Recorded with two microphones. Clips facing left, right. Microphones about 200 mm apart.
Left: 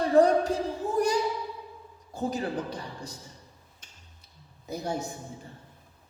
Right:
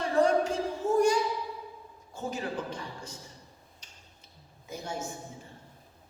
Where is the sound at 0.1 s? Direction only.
35° left (ahead or behind).